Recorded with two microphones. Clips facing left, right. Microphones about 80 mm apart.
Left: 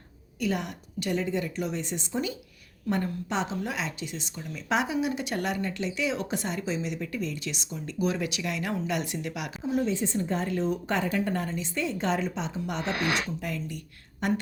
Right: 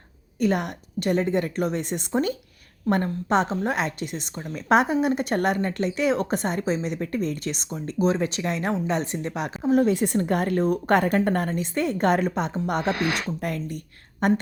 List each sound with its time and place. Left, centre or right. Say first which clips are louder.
0.3 s a woman's voice: right 6 dB; right
9.7 s speech: right 7 dB; right